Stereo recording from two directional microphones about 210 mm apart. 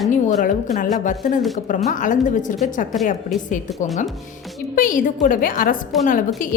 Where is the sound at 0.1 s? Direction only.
35° left (ahead or behind).